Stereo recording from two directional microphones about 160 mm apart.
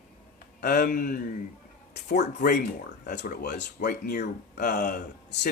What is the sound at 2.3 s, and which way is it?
Speech, 70° left (ahead or behind).